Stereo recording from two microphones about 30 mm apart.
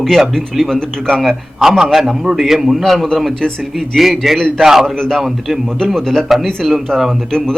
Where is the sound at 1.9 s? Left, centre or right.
Centre.